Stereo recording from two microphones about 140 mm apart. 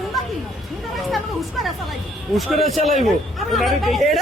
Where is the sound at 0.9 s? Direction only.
Centre (ahead or behind).